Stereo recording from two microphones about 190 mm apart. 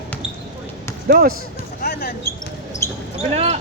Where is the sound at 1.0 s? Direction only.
50° right (ahead or behind).